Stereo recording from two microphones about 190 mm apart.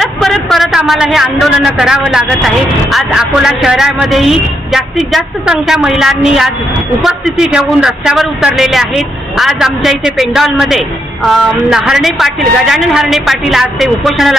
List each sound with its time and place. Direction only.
0.0 s speech: centre (ahead or behind)